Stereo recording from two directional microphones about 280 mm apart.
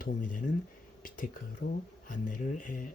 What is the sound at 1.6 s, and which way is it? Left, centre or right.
Speech, left.